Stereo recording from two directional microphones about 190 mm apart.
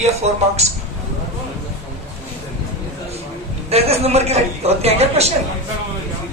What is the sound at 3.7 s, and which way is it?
A woman's voice, 35° right (ahead or behind).